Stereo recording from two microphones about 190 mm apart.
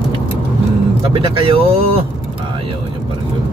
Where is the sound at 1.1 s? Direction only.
30° right (ahead or behind).